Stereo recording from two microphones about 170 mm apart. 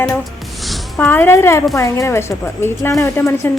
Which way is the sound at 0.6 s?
5° left (ahead or behind).